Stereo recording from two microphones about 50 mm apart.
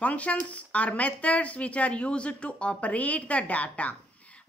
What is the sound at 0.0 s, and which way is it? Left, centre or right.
Speech, left.